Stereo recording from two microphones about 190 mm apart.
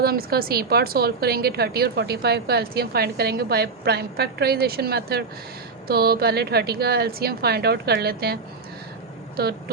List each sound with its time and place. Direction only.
0.0 s a woman's voice: 55° right (ahead or behind)